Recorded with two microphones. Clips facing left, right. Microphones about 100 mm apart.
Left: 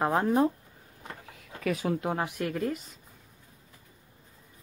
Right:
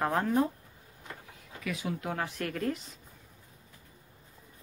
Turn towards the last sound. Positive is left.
turn(degrees=5)  # may be behind; listen again after turning